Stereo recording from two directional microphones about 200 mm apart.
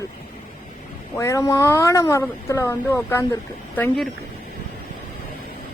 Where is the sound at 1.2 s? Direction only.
15° left (ahead or behind).